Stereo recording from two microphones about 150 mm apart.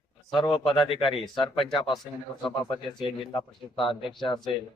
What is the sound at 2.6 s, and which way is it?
Speech, 35° left (ahead or behind).